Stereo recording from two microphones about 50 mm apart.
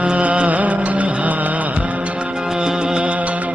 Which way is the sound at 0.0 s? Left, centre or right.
Right.